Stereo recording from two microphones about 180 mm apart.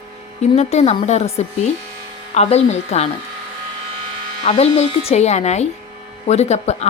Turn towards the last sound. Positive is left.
turn(degrees=40)  # may be behind; listen again after turning